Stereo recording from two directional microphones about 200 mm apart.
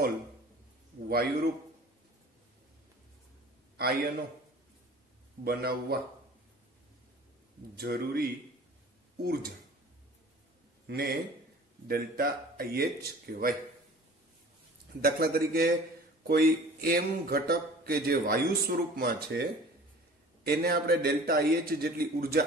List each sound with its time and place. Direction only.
1.0 s a man's voice: 50° right (ahead or behind)
5.4 s a man's voice: 50° right (ahead or behind)
7.7 s a man's voice: 50° right (ahead or behind)
10.9 s a man's voice: 50° right (ahead or behind)
15.0 s a man's voice: 50° right (ahead or behind)